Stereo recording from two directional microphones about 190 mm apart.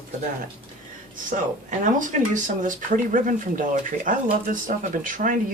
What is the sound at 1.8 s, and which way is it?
Speech, 40° right (ahead or behind).